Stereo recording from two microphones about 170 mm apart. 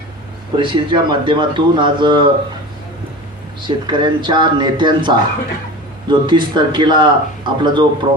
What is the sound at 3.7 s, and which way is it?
Speech, 30° right (ahead or behind).